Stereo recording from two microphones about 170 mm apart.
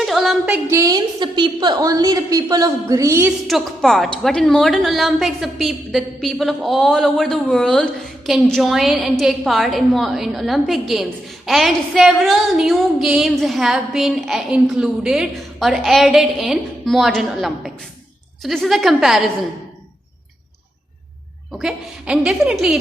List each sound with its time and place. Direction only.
0.0 s music: centre (ahead or behind)
0.7 s a woman's voice: 20° right (ahead or behind)
3.4 s a woman's voice: centre (ahead or behind)
21.6 s a woman's voice: 5° right (ahead or behind)